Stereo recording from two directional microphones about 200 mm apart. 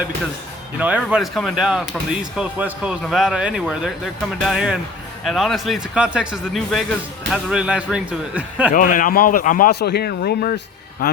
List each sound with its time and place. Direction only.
0.8 s speech: 5° right (ahead or behind)
8.7 s a man's voice: 40° left (ahead or behind)